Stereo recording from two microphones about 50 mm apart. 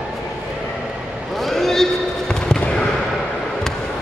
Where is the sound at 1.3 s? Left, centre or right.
Centre.